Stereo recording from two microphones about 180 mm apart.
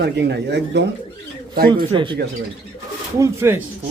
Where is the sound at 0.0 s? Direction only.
65° right (ahead or behind).